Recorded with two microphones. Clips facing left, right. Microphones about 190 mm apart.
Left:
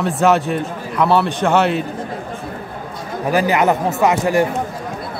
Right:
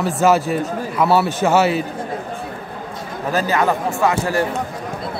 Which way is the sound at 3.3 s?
15° left (ahead or behind).